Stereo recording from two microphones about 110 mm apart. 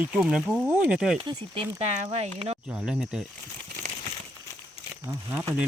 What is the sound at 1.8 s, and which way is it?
Speech, 90° right.